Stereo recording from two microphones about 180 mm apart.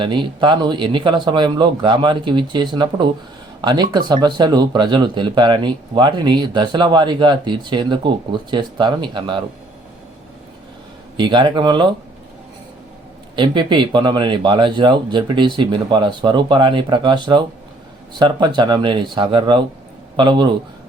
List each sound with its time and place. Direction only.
0.0 s speech: 25° right (ahead or behind)
11.2 s speech: 25° right (ahead or behind)
13.3 s speech: 25° right (ahead or behind)